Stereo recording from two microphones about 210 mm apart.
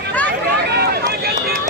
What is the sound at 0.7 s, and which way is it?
Run, 50° right (ahead or behind).